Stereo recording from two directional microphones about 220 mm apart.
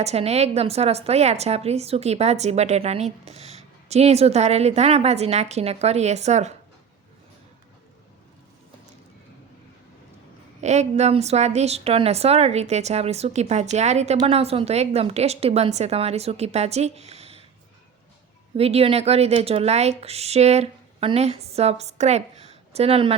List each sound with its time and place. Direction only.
0.0 s a woman's voice: 30° right (ahead or behind)
10.6 s a woman's voice: 30° right (ahead or behind)
18.5 s a woman's voice: 25° right (ahead or behind)